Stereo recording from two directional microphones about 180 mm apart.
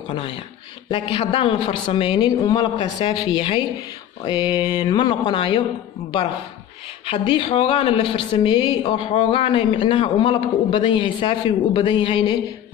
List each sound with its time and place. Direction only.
0.1 s a sound: 30° left (ahead or behind)
0.8 s speech: 30° left (ahead or behind)
7.1 s speech: 30° left (ahead or behind)